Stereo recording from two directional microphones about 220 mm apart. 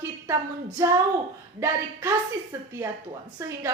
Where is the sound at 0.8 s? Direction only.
10° right (ahead or behind).